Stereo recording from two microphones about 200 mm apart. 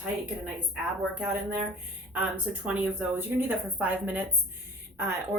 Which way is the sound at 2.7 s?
5° right (ahead or behind).